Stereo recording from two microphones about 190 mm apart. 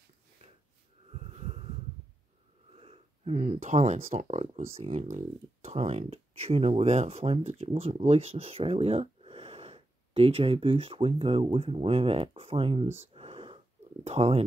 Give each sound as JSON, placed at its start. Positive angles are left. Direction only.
{"t": 1.1, "sound": "snort", "side_deg": -35}
{"t": 2.7, "sound": "wheeze", "side_deg": -30}
{"t": 3.3, "sound": "speech", "side_deg": -40}
{"t": 13.1, "sound": "a sound", "side_deg": -30}
{"t": 14.0, "sound": "speech", "side_deg": -35}